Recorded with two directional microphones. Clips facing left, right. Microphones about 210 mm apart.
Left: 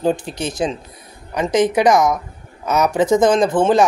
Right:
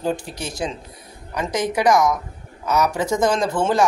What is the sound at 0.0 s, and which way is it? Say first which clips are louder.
A man's voice: left 5 dB; 20° left (ahead or behind).